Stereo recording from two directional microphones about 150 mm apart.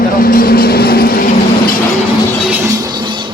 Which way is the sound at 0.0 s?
75° left (ahead or behind).